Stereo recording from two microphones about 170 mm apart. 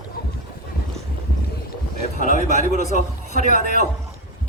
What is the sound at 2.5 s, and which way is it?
Speech, 50° right (ahead or behind).